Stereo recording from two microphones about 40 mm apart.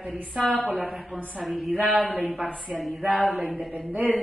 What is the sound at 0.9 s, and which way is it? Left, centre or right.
Speech, centre.